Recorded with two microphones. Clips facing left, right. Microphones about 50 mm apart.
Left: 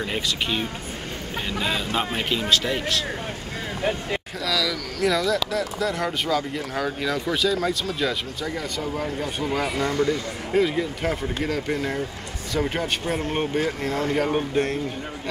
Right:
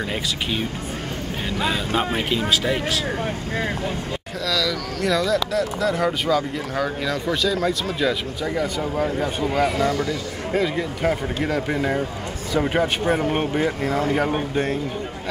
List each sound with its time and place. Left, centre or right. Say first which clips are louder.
0.1 s speech: even; centre
2.0 s speech: right 3 dB; centre
4.5 s speech: right 2 dB; centre
8.5 s speech: right 6 dB; centre
9.5 s speech: right 4 dB; centre
11.1 s speech: right 3 dB; centre
13.8 s speech: right 2 dB; centre